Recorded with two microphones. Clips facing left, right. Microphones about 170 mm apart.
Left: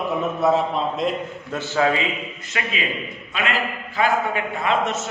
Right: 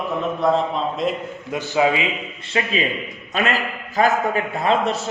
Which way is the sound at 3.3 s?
40° right (ahead or behind).